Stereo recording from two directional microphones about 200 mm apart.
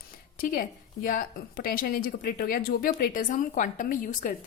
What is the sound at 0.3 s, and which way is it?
A woman's voice, 45° left (ahead or behind).